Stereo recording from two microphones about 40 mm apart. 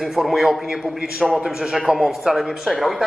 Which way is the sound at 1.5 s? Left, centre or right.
Centre.